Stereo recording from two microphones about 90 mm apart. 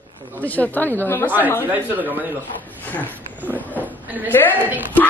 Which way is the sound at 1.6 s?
20° right (ahead or behind).